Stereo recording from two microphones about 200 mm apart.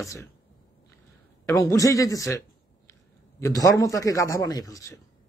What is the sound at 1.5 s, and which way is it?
Speech, 15° left (ahead or behind).